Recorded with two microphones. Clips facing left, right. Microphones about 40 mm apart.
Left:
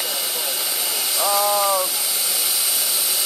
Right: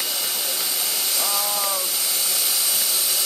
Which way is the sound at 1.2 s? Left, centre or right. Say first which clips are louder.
Left 10 dB; centre.